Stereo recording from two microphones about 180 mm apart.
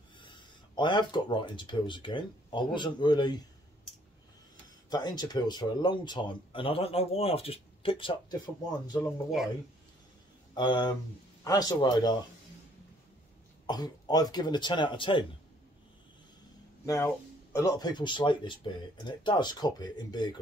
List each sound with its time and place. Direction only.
0.2 s speech: 25° left (ahead or behind)
4.8 s speech: 20° left (ahead or behind)
8.8 s speech: 15° left (ahead or behind)
10.5 s speech: 25° left (ahead or behind)
13.7 s speech: 20° left (ahead or behind)
16.8 s speech: 15° left (ahead or behind)